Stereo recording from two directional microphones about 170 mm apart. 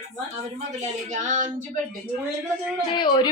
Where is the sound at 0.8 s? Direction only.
45° right (ahead or behind).